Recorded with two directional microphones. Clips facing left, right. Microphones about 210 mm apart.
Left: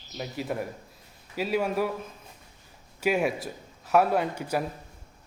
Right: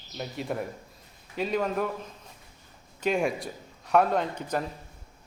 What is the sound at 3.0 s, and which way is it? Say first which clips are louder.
A man's voice: left 1 dB; 5° left (ahead or behind).